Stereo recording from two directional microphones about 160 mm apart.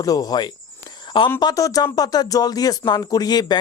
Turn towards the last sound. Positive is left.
turn(degrees=25)  # may be behind; listen again after turning